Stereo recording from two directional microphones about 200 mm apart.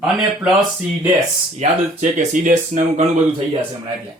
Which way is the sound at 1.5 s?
35° right (ahead or behind).